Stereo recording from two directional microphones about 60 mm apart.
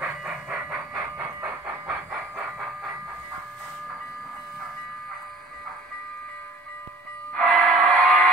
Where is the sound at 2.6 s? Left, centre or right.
Centre.